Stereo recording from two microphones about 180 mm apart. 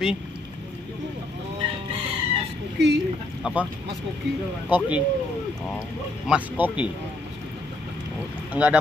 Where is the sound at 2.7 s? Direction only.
70° right (ahead or behind).